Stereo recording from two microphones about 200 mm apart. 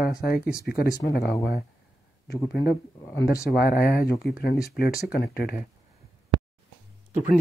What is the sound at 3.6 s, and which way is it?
Speech, 50° left (ahead or behind).